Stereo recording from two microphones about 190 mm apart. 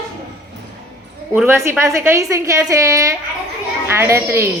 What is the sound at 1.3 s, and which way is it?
A woman's voice, 10° right (ahead or behind).